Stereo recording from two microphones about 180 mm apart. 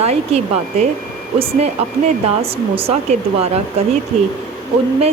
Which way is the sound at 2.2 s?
30° right (ahead or behind).